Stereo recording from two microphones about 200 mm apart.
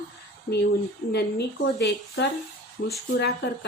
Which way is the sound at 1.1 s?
55° left (ahead or behind).